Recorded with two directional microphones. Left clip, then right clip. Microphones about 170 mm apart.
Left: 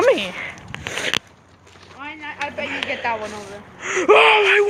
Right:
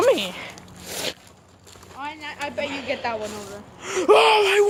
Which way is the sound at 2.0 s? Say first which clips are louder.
Even; 55° right (ahead or behind).